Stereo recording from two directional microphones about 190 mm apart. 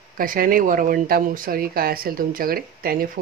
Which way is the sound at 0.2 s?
45° right (ahead or behind).